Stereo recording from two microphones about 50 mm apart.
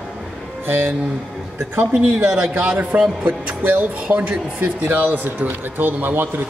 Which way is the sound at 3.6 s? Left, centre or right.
Right.